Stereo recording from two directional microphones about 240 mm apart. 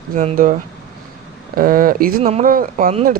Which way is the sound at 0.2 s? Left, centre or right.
Right.